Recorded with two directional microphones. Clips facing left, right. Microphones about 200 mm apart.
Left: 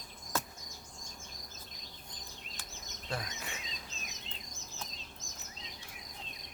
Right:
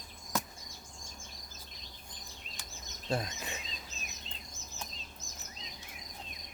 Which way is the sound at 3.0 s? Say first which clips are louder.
Right 6 dB; 25° right (ahead or behind).